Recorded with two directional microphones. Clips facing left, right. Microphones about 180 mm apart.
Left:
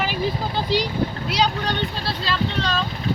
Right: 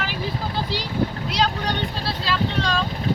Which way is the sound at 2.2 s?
10° right (ahead or behind).